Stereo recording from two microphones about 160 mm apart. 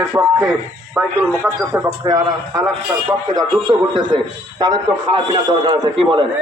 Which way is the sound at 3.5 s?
30° right (ahead or behind).